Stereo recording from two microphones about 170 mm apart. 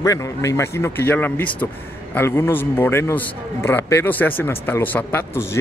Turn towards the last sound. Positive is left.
turn(degrees=15)  # may be behind; listen again after turning